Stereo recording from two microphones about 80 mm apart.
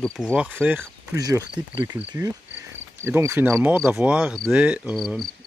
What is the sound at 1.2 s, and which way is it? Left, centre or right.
Speech, right.